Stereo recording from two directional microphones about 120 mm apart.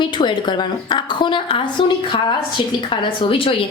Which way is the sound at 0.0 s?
40° left (ahead or behind).